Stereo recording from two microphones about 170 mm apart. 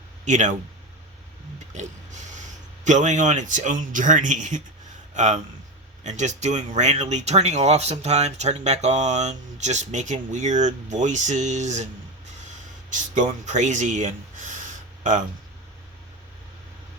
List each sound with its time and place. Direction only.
0.3 s speech: 45° right (ahead or behind)
1.5 s a sound: 45° right (ahead or behind)
2.8 s speech: 45° right (ahead or behind)
12.9 s speech: 45° right (ahead or behind)